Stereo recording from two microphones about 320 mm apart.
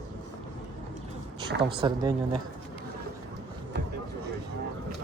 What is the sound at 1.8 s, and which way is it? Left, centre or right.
Speech, centre.